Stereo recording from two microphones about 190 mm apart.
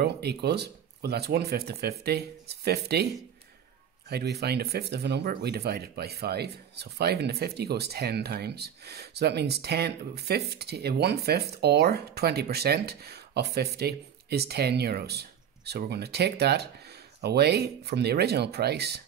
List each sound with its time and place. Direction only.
0.0 s speech: 60° right (ahead or behind)
4.1 s speech: 60° right (ahead or behind)